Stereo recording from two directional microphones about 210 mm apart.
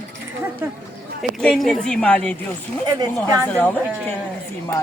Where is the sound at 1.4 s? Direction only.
Centre (ahead or behind).